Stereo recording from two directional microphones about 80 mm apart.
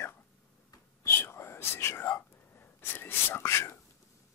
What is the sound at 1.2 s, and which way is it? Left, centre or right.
Whispering, left.